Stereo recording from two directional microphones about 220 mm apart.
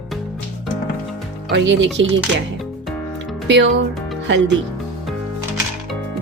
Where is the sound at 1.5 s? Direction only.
55° right (ahead or behind).